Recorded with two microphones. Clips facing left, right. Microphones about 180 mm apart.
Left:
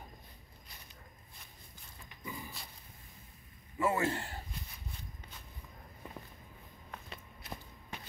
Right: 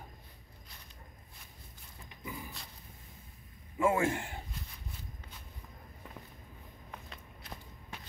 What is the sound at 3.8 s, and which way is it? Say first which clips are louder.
Speech: right 3 dB; 10° right (ahead or behind).